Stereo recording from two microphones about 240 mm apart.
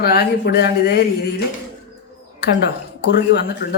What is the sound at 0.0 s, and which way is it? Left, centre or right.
Speech, left.